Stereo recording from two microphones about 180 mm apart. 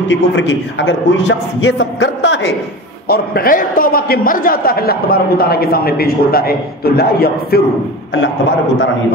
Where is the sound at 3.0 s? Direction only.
60° left (ahead or behind).